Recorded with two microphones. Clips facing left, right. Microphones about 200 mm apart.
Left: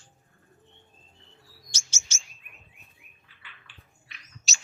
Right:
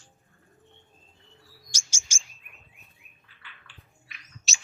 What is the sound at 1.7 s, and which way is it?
Bird, 10° right (ahead or behind).